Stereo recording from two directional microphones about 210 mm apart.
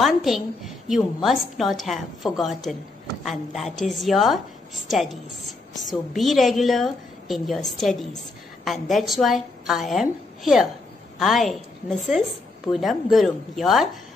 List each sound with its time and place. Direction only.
0.0 s a woman's voice: centre (ahead or behind)